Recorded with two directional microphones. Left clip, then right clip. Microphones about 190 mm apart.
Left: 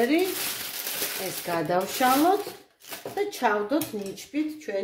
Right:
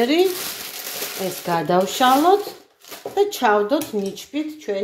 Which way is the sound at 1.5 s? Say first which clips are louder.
Right 7 dB; 35° right (ahead or behind).